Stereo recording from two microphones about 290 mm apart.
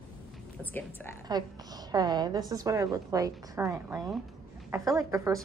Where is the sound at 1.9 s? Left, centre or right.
Centre.